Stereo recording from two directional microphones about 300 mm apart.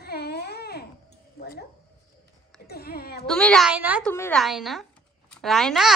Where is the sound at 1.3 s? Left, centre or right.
Left.